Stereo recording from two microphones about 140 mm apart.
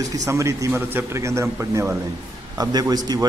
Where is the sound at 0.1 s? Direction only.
25° right (ahead or behind).